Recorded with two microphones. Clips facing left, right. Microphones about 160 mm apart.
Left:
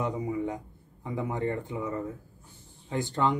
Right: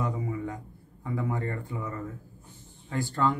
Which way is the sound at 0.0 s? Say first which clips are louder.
Left 2 dB; 20° left (ahead or behind).